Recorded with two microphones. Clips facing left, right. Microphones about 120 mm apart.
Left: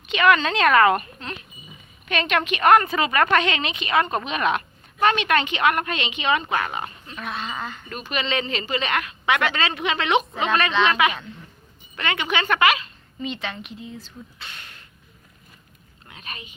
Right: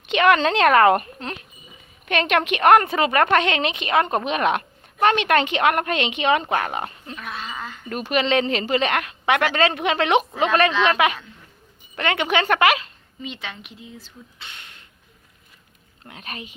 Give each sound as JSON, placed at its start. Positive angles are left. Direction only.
{"t": 0.1, "sound": "a woman's voice", "side_deg": -65}
{"t": 3.0, "sound": "a woman's voice", "side_deg": -50}
{"t": 7.2, "sound": "speech", "side_deg": 0}
{"t": 8.1, "sound": "a woman's voice", "side_deg": -65}
{"t": 13.2, "sound": "a woman's voice", "side_deg": -10}
{"t": 16.0, "sound": "speech", "side_deg": -60}